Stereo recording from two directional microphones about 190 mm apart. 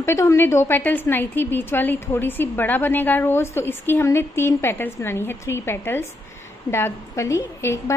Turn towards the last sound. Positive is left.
turn(degrees=15)  # may be behind; listen again after turning